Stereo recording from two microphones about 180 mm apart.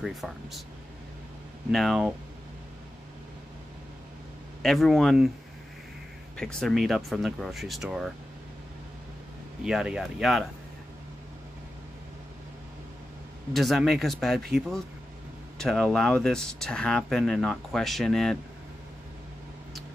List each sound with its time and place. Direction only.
0.0 s speech: centre (ahead or behind)
1.7 s speech: centre (ahead or behind)
4.6 s speech: centre (ahead or behind)
6.3 s speech: 5° left (ahead or behind)
9.6 s speech: 5° right (ahead or behind)
13.5 s speech: centre (ahead or behind)